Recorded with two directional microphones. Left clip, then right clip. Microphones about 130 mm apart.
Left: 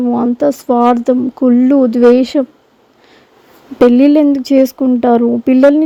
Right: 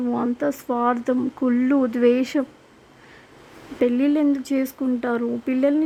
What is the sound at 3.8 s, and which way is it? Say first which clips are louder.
Speech: left 12 dB; 50° left (ahead or behind).